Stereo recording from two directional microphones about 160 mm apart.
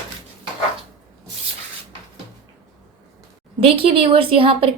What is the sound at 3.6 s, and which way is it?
A woman's voice, 35° right (ahead or behind).